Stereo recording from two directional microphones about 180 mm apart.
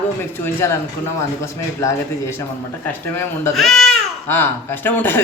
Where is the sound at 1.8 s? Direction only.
15° left (ahead or behind).